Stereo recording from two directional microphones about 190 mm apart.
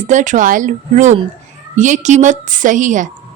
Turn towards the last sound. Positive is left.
turn(degrees=-40)  # may be behind; listen again after turning